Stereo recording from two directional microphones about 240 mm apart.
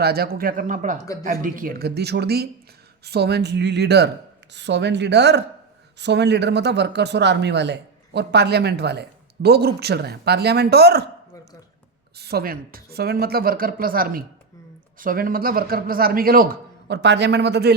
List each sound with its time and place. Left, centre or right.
0.0 s a man's voice: right
12.1 s a man's voice: right